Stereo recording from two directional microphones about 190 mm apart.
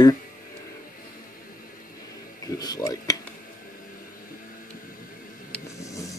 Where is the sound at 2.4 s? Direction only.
20° left (ahead or behind).